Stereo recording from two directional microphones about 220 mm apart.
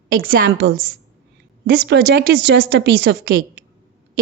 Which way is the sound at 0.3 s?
55° right (ahead or behind).